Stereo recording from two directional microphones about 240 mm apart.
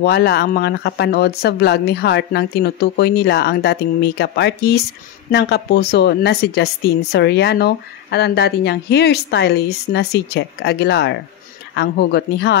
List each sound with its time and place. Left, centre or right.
0.0 s speech: left